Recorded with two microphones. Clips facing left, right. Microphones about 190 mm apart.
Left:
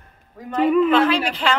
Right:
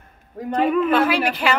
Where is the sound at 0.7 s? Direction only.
5° right (ahead or behind).